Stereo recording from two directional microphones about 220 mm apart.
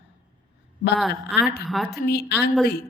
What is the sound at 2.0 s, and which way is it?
Speech, 45° left (ahead or behind).